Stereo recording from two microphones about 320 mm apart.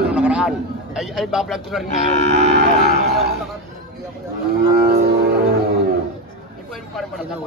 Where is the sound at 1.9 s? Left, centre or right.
Left.